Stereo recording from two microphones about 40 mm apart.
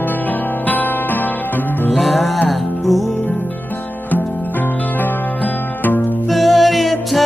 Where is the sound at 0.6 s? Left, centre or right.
Left.